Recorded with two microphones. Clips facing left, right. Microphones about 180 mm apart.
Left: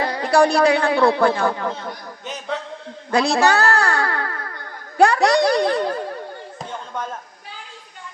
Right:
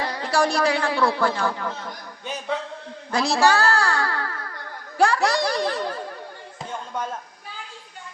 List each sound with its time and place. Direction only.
0.0 s speech: 65° left (ahead or behind)
3.1 s a woman's voice: 60° left (ahead or behind)
3.5 s music: 60° left (ahead or behind)
4.9 s speech: 60° left (ahead or behind)